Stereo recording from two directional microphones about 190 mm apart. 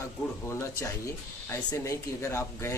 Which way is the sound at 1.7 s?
15° left (ahead or behind).